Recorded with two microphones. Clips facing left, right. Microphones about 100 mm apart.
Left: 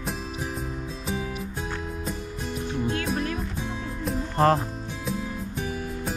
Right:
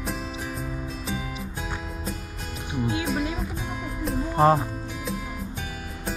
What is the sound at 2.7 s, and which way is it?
Music, 15° right (ahead or behind).